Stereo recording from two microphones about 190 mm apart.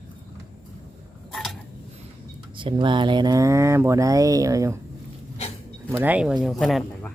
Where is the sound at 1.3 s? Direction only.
Centre (ahead or behind).